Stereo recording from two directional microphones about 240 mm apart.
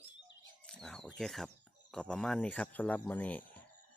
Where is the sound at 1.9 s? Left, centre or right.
Centre.